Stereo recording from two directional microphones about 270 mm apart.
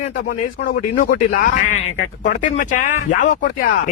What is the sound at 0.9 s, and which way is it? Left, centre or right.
Speech, left.